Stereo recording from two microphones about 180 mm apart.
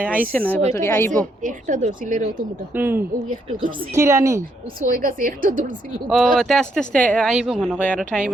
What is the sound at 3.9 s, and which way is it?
Speech, 15° right (ahead or behind).